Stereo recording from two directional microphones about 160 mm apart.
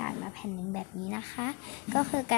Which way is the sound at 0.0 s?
5° left (ahead or behind).